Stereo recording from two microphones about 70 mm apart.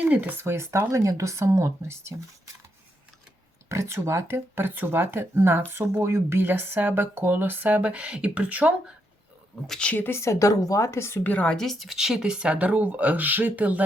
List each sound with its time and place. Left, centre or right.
0.0 s speech: right
3.7 s speech: right; by 8.7 s centre
9.6 s speech: centre
9.9 s speech: left
11.2 s speech: left
11.5 s speech: centre; by 13.8 s right